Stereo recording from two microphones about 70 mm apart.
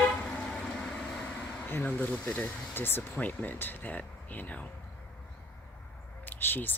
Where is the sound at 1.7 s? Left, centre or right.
Left.